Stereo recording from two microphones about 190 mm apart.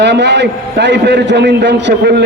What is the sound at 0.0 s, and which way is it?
A man's voice, 65° right (ahead or behind).